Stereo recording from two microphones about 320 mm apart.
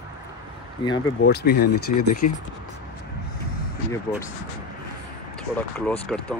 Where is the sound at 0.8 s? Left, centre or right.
Centre.